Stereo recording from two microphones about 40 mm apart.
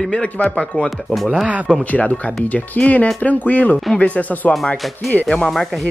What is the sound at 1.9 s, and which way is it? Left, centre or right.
Speech, left.